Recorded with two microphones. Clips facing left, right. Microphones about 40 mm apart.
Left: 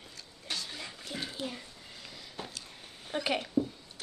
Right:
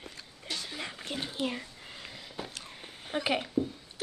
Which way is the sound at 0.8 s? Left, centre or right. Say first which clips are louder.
Right 4 dB; right.